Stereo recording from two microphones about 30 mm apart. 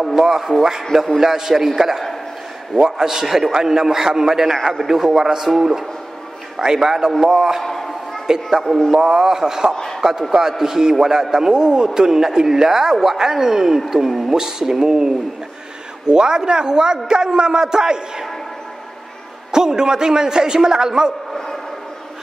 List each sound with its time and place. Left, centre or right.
0.0 s a man's voice: centre
6.6 s a man's voice: centre
7.6 s a sound: centre
8.3 s a man's voice: centre
19.5 s a man's voice: right